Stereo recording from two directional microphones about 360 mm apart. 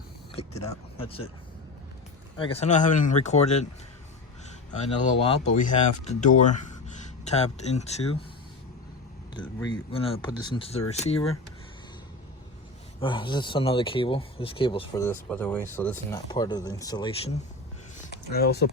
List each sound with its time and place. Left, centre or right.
0.3 s speech: centre
2.4 s speech: centre
5.2 s speech: centre
9.3 s speech: centre
13.0 s speech: centre
18.1 s speech: left